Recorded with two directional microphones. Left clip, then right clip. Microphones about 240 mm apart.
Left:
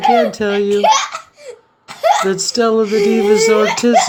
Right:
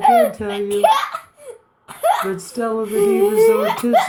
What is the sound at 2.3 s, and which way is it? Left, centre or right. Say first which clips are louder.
Speech: left 8 dB; left.